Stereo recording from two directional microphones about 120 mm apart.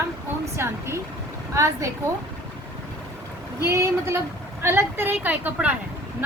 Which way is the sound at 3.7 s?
25° right (ahead or behind).